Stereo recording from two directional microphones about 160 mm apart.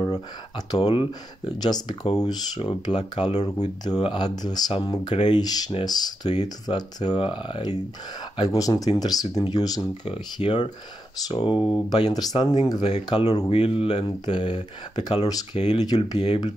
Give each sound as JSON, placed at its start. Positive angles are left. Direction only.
{"t": 0.0, "sound": "speech", "side_deg": 25}
{"t": 3.8, "sound": "speech", "side_deg": 25}
{"t": 10.0, "sound": "speech", "side_deg": 35}
{"t": 12.8, "sound": "speech", "side_deg": 40}